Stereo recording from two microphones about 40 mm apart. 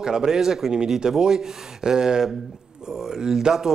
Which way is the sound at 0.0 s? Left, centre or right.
Centre.